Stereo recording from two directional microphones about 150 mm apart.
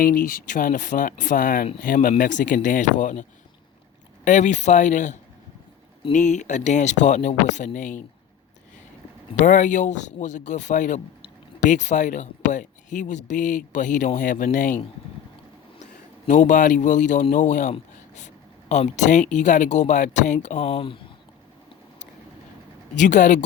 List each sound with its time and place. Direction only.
0.0 s speech: 70° left (ahead or behind)
6.1 s speech: 55° left (ahead or behind)
9.4 s speech: 55° left (ahead or behind)
15.8 s a man's voice: 55° left (ahead or behind); by 21.0 s 35° left (ahead or behind)
23.0 s speech: 55° left (ahead or behind)